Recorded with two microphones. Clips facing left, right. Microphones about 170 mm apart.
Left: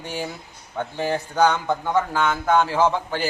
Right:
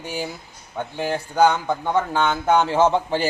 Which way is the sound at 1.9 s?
20° right (ahead or behind).